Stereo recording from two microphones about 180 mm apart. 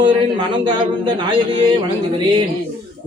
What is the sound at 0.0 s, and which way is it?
A man's voice, 25° right (ahead or behind).